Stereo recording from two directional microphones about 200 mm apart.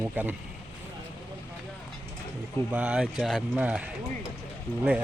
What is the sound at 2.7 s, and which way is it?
Speech, 5° right (ahead or behind).